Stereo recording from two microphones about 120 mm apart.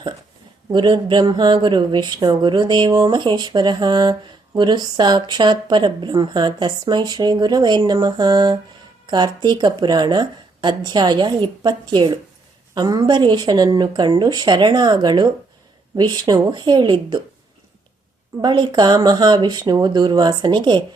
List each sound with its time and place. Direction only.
0.7 s speech: 40° right (ahead or behind)
18.4 s speech: 35° right (ahead or behind)